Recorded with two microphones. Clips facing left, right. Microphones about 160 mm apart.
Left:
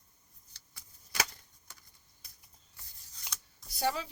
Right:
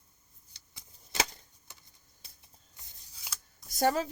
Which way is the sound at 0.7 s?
20° right (ahead or behind).